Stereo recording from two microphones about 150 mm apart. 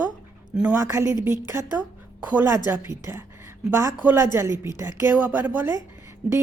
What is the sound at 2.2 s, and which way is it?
A woman's voice, 15° right (ahead or behind).